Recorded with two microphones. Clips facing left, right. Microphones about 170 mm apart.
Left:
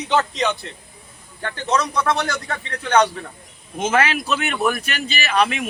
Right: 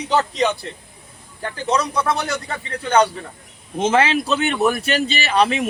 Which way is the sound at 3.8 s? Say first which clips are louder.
Right 3 dB; 30° right (ahead or behind).